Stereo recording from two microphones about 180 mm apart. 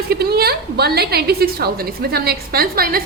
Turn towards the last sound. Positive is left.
turn(degrees=-55)  # may be behind; listen again after turning